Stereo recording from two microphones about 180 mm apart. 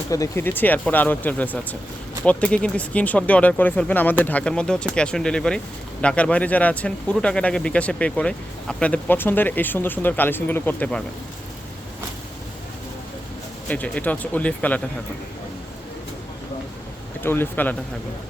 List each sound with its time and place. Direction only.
0.1 s speech: 15° left (ahead or behind)
13.7 s speech: 5° left (ahead or behind)
17.2 s speech: 10° left (ahead or behind)